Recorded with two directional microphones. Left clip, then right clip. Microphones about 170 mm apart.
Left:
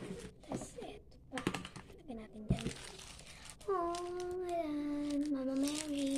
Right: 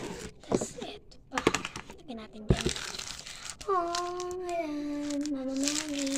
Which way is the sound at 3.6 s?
10° left (ahead or behind).